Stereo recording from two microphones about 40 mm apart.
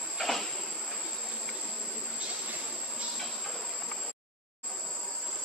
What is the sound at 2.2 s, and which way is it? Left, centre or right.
Train, right.